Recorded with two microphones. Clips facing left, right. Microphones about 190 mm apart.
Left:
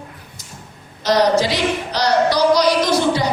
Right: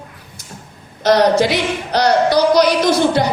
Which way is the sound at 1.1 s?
60° right (ahead or behind).